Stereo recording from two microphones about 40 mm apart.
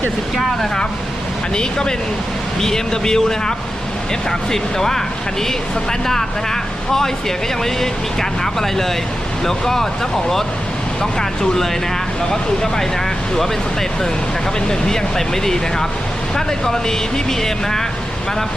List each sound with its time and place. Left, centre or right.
0.3 s speech: centre
2.6 s speech: centre
6.1 s speech: centre
14.7 s speech: centre